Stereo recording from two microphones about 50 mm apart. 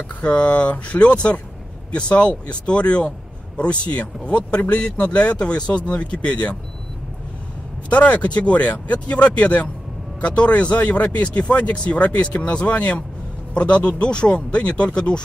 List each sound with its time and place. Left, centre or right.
0.2 s speech: left
7.9 s speech: left